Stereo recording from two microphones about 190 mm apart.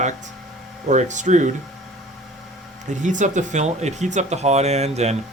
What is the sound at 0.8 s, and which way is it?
Speech, 40° right (ahead or behind).